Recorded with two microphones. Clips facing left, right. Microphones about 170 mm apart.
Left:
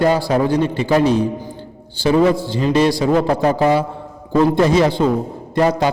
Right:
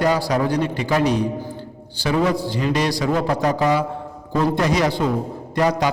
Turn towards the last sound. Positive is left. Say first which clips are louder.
# left 3 dB
turn(degrees=30)  # may be behind; listen again after turning